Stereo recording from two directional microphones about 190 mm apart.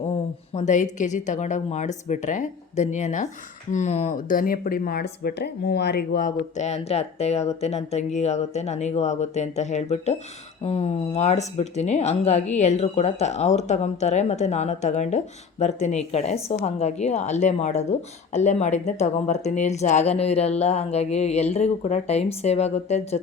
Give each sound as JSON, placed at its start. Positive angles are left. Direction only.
{"t": 0.5, "sound": "speech", "side_deg": 40}